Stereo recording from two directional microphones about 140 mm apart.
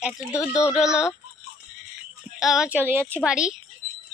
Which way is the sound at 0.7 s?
5° right (ahead or behind).